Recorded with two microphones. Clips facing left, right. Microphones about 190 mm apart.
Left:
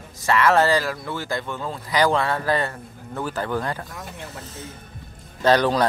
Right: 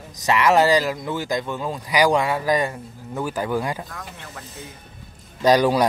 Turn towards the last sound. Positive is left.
turn(degrees=-10)  # may be behind; listen again after turning